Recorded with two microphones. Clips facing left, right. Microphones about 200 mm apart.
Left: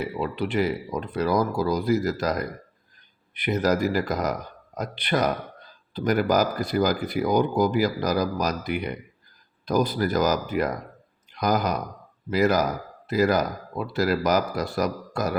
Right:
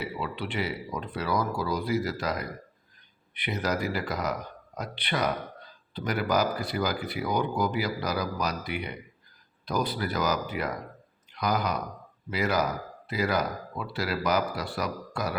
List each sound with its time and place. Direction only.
0.2 s a man's voice: 40° left (ahead or behind)